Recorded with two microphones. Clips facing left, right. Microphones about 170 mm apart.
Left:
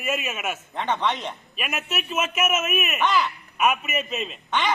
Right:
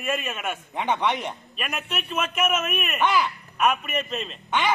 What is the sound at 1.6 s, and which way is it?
A man's voice, 5° left (ahead or behind).